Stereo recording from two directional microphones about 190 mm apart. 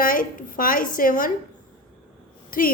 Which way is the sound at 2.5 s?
45° left (ahead or behind).